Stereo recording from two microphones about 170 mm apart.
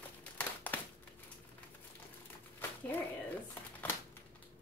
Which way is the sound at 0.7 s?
10° left (ahead or behind).